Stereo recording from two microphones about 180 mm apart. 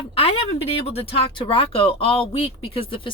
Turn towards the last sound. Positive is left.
turn(degrees=30)  # may be behind; listen again after turning